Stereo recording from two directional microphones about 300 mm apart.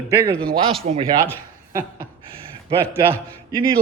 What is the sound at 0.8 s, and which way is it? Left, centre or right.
Speech, centre.